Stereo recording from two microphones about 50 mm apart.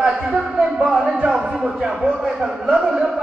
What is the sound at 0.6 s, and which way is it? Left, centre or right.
Speech, centre.